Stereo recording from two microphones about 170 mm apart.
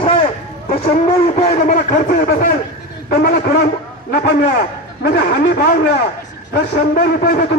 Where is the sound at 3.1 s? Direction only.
60° left (ahead or behind).